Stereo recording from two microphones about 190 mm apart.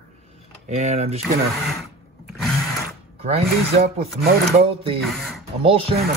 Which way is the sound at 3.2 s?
30° right (ahead or behind).